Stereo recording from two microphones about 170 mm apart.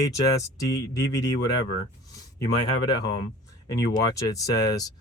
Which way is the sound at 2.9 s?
25° left (ahead or behind).